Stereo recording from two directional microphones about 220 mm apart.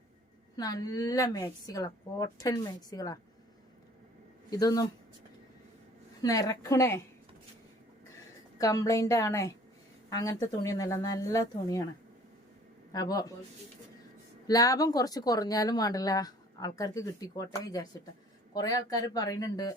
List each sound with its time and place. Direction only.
0.5 s speech: 15° left (ahead or behind)
4.4 s speech: 15° left (ahead or behind)
6.2 s speech: 15° left (ahead or behind)
8.5 s speech: 15° left (ahead or behind)
12.9 s speech: 15° left (ahead or behind)
14.4 s speech: 15° left (ahead or behind)